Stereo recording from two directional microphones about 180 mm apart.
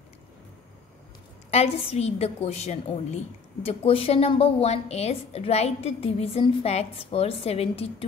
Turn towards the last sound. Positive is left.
turn(degrees=35)  # may be behind; listen again after turning